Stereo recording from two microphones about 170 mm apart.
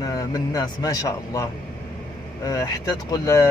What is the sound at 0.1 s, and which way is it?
Speech, 20° left (ahead or behind).